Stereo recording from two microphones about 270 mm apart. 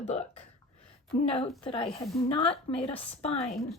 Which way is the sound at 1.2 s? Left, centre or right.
Left.